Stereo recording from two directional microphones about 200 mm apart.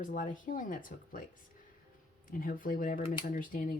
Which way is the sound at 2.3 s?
45° left (ahead or behind).